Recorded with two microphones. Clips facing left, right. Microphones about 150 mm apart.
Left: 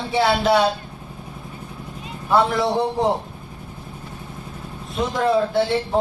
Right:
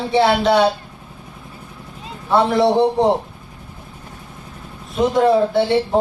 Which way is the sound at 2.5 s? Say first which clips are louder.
Right 6 dB; 25° right (ahead or behind).